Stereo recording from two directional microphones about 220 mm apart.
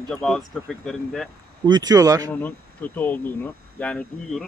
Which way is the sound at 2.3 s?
5° left (ahead or behind).